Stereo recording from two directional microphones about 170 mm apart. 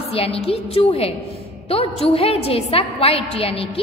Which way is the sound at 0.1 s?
35° left (ahead or behind).